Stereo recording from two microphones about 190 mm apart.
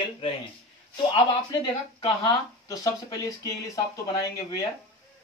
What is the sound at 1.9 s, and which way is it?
Speech, 20° left (ahead or behind).